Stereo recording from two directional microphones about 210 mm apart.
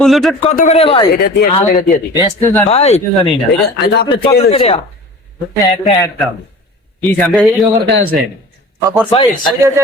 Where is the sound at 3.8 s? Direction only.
55° left (ahead or behind).